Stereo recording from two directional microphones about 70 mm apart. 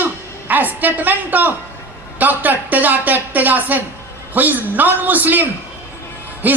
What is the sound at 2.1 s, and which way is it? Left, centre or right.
Speech, right.